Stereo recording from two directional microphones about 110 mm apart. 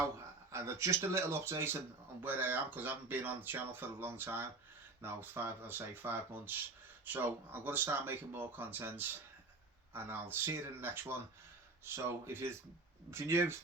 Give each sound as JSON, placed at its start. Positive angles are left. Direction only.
{"t": 0.5, "sound": "speech", "side_deg": -25}